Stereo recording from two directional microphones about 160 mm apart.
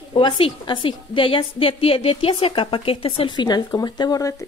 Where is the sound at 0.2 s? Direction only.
30° left (ahead or behind).